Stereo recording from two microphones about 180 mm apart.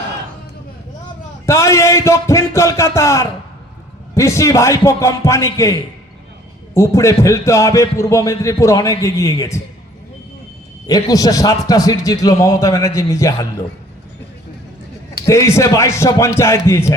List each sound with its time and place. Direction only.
1.5 s a man's voice: 15° left (ahead or behind)
6.7 s a man's voice: 15° left (ahead or behind)
10.8 s a man's voice: 20° left (ahead or behind)
15.3 s a man's voice: 15° left (ahead or behind)